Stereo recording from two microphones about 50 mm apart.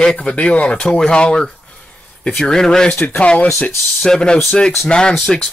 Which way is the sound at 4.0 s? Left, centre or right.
Centre.